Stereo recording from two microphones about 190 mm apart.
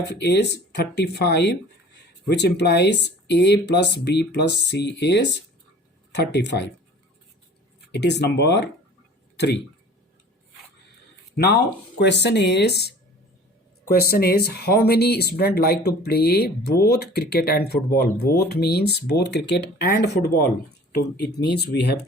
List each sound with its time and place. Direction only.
0.2 s speech: 60° left (ahead or behind)
7.9 s speech: 65° left (ahead or behind)
11.3 s speech: 60° left (ahead or behind)